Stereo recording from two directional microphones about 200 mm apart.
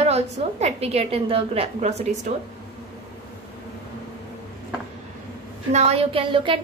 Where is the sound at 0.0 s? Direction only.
35° right (ahead or behind).